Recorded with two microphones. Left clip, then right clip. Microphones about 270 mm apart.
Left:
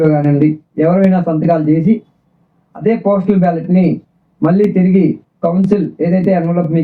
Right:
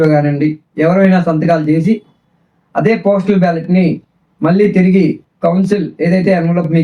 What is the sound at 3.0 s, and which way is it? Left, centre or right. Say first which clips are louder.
A man's voice: right 1 dB; right.